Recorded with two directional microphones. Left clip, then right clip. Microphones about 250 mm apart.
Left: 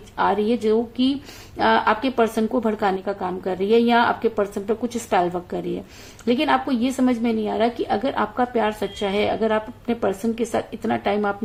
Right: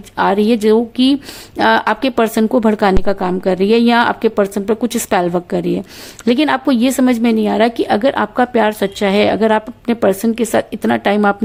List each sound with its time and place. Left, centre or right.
0.2 s a woman's voice: right